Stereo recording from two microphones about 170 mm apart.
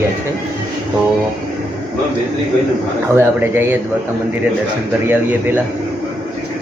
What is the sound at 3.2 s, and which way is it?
Speech, 10° right (ahead or behind).